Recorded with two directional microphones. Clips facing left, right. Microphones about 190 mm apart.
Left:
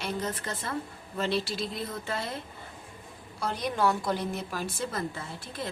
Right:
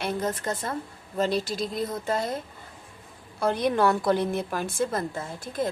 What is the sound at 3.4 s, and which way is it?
A woman's voice, 60° right (ahead or behind).